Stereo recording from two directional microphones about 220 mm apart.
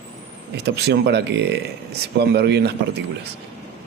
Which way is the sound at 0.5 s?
50° right (ahead or behind).